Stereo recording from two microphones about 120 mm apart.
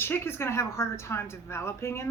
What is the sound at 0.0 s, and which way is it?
A woman's voice, 20° left (ahead or behind).